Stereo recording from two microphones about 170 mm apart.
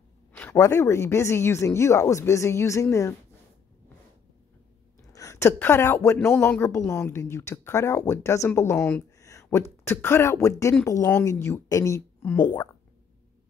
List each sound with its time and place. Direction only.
0.3 s speech: 15° left (ahead or behind)
5.0 s a woman's voice: 20° left (ahead or behind)